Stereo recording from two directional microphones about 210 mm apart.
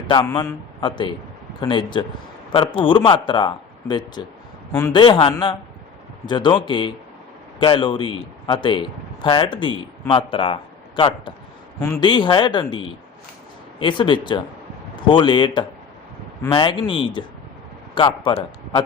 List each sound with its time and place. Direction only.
0.1 s speech: 20° left (ahead or behind)